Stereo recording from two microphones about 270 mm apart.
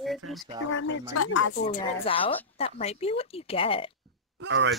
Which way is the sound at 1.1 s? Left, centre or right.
Left.